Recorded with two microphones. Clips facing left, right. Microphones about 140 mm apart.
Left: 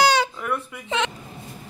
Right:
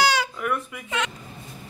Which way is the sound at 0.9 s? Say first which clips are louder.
Left 4 dB; 25° left (ahead or behind).